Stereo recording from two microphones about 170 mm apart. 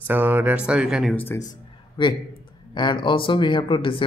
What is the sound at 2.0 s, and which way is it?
A man's voice, 30° left (ahead or behind).